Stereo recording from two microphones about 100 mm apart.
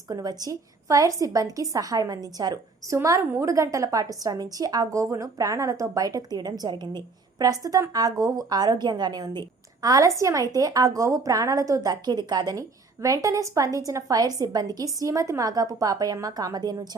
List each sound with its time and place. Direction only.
0.1 s a woman's voice: 40° right (ahead or behind)